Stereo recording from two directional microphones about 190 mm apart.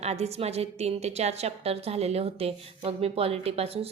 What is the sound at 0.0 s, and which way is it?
A woman's voice, 35° right (ahead or behind).